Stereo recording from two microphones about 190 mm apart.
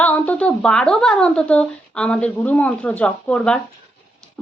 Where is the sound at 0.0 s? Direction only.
10° left (ahead or behind).